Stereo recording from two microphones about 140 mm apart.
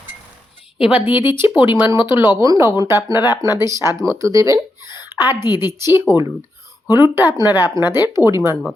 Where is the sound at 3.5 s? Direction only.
20° right (ahead or behind).